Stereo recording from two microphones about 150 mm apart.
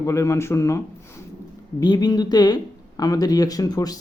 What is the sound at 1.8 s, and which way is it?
Speech, 30° left (ahead or behind).